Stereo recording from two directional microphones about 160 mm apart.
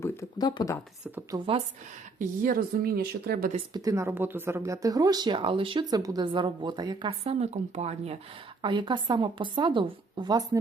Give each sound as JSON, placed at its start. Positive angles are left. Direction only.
{"t": 0.0, "sound": "speech", "side_deg": 20}
{"t": 1.3, "sound": "speech", "side_deg": -25}
{"t": 2.1, "sound": "speech", "side_deg": -60}
{"t": 3.5, "sound": "speech", "side_deg": -25}
{"t": 7.3, "sound": "speech", "side_deg": -40}
{"t": 8.6, "sound": "speech", "side_deg": -30}